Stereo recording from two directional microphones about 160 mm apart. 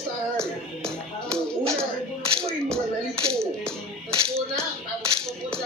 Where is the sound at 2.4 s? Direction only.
5° left (ahead or behind).